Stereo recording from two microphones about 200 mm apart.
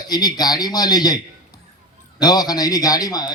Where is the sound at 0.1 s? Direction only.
20° left (ahead or behind).